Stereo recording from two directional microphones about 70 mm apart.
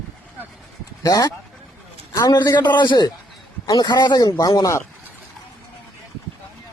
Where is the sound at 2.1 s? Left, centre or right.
Left.